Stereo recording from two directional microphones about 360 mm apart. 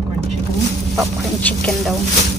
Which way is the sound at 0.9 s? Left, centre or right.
Centre.